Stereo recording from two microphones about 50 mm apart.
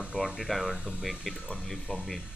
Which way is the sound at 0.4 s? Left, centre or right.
Centre.